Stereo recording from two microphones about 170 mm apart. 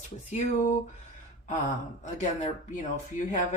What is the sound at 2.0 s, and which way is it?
Speech, 45° left (ahead or behind).